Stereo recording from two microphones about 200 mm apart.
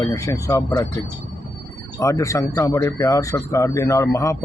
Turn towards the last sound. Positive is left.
turn(degrees=15)  # may be behind; listen again after turning